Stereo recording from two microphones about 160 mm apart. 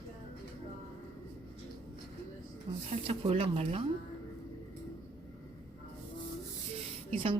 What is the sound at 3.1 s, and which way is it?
Speech, 35° right (ahead or behind).